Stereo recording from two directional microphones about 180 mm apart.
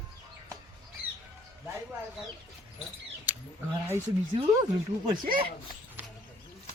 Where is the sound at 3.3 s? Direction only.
10° right (ahead or behind).